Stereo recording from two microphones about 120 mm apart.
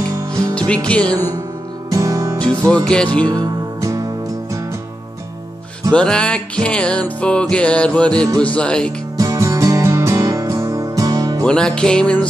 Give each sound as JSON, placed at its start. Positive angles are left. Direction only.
{"t": 0.3, "sound": "music", "side_deg": -30}
{"t": 0.8, "sound": "music", "side_deg": 10}
{"t": 1.9, "sound": "music", "side_deg": -30}
{"t": 2.3, "sound": "music", "side_deg": 10}
{"t": 3.3, "sound": "music", "side_deg": -30}
{"t": 5.9, "sound": "music", "side_deg": 10}
{"t": 9.2, "sound": "music", "side_deg": -30}
{"t": 11.4, "sound": "music", "side_deg": 5}